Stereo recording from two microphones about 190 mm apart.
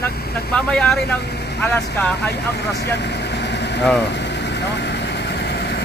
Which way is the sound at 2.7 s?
60° left (ahead or behind).